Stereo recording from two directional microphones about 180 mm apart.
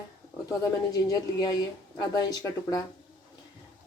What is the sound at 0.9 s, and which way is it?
Speech, 20° left (ahead or behind).